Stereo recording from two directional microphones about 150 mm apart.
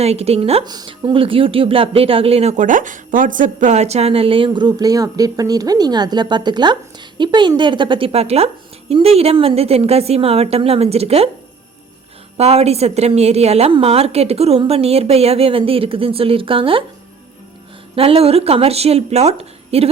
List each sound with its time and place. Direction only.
0.0 s a woman's voice: 45° right (ahead or behind)
0.6 s a woman's voice: 25° right (ahead or behind)
12.4 s a woman's voice: 45° right (ahead or behind)
17.9 s speech: 40° right (ahead or behind)